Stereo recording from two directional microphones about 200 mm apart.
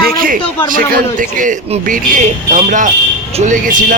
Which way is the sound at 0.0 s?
45° right (ahead or behind).